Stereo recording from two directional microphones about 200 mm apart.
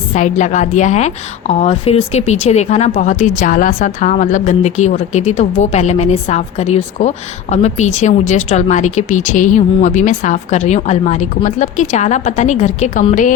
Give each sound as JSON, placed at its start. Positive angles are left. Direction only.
{"t": 0.1, "sound": "a woman's voice", "side_deg": 35}